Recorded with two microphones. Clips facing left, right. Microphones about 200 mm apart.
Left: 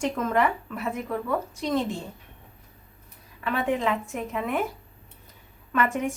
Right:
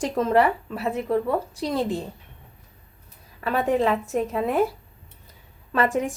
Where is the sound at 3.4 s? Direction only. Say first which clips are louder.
Right 4 dB; 40° right (ahead or behind).